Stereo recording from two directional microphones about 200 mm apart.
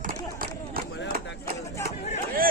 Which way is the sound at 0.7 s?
45° right (ahead or behind).